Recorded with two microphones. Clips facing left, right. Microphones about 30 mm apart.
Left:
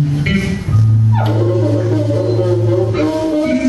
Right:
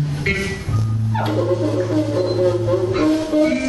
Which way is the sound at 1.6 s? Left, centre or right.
Centre.